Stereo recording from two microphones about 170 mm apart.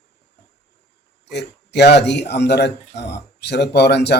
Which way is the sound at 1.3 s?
80° left.